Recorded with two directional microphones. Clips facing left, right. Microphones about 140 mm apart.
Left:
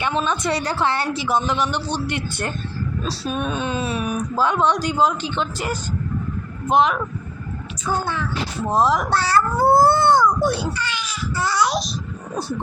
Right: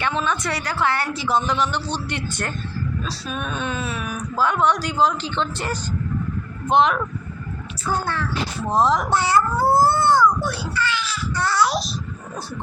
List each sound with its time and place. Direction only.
0.0 s a man's voice: 20° left (ahead or behind)
3.0 s speech: 30° left (ahead or behind)
3.5 s speech: 20° left (ahead or behind); by 7.0 s 5° left (ahead or behind)
8.6 s speech: 5° left (ahead or behind)
9.0 s a child's voice: 20° right (ahead or behind)
9.6 s speech: 25° left (ahead or behind)
11.3 s speech: centre (ahead or behind)